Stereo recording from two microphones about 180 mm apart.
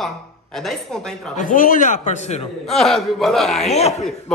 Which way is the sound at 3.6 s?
35° left (ahead or behind).